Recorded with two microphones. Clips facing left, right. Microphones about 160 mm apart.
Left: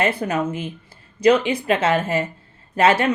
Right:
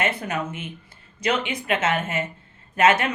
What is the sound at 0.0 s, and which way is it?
A woman's voice, 30° left (ahead or behind).